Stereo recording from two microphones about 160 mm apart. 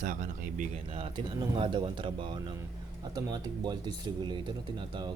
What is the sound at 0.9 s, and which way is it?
Speech, 35° right (ahead or behind).